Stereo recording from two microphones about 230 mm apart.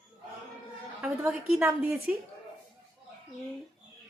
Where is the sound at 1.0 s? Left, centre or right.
Centre.